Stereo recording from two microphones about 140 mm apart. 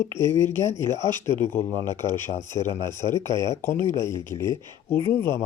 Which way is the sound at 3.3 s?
30° right (ahead or behind).